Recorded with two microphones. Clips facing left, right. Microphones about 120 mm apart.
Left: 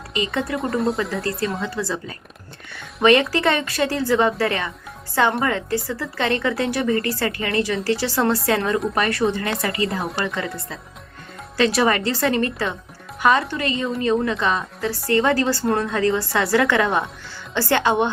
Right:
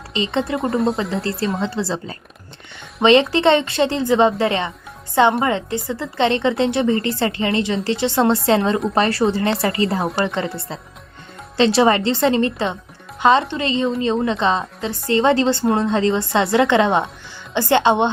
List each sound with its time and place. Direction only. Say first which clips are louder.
0.1 s a woman's voice: right 3 dB; 25° right (ahead or behind)
0.6 s a woman's voice: right 2 dB; centre (ahead or behind)
1.2 s a woman's voice: right 3 dB; 30° right (ahead or behind)
11.5 s a woman's voice: right 4 dB; 25° right (ahead or behind)